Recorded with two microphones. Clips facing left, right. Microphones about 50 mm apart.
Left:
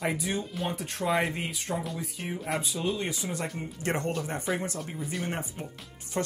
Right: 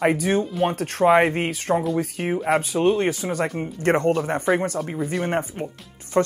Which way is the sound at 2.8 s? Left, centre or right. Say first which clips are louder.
Right 13 dB; right.